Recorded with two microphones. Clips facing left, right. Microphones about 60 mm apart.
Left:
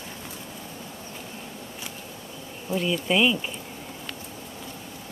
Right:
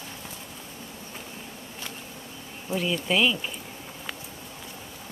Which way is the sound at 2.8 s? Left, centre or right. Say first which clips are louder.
Left 2 dB; centre.